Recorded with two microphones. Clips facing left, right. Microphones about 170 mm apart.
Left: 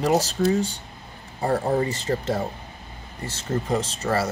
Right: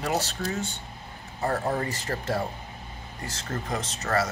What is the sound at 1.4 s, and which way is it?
Speech, 25° left (ahead or behind).